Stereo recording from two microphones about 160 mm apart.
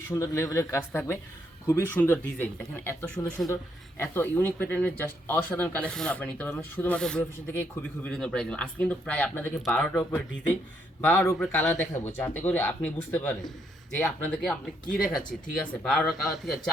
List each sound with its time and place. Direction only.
0.1 s speech: 20° left (ahead or behind)
15.5 s speech: centre (ahead or behind)